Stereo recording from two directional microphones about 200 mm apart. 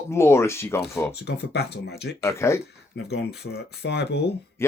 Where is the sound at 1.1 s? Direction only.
55° left (ahead or behind).